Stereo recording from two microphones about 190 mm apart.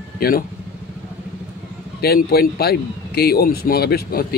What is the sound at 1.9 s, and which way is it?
Speech, 55° left (ahead or behind).